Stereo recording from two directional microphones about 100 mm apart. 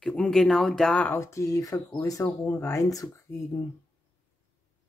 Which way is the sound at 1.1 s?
30° left (ahead or behind).